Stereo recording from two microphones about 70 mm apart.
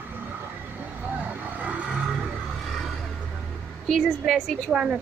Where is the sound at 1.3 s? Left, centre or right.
Right.